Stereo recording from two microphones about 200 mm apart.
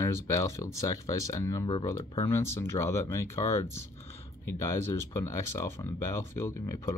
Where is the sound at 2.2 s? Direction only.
15° left (ahead or behind).